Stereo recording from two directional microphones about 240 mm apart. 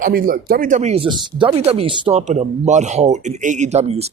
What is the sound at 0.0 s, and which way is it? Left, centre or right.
Speech, right.